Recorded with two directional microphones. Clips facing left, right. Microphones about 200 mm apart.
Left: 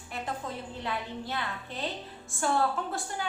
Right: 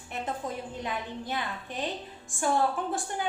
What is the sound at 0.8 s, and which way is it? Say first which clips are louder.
A woman's voice: left 1 dB; 15° right (ahead or behind).